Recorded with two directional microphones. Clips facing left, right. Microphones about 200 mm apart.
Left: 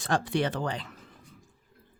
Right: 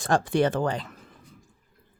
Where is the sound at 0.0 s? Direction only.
45° right (ahead or behind).